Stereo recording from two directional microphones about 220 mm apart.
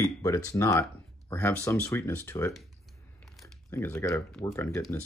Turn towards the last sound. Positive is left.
turn(degrees=10)  # may be behind; listen again after turning